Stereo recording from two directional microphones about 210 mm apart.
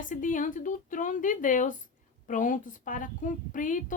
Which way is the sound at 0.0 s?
40° left (ahead or behind).